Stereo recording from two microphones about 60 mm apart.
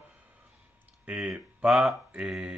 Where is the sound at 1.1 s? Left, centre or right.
Centre.